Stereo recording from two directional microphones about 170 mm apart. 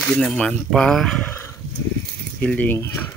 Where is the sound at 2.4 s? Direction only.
10° left (ahead or behind).